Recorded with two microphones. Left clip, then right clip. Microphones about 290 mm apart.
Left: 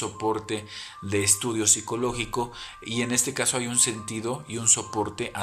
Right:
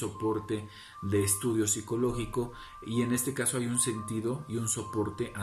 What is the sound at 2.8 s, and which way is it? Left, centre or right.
Speech, left.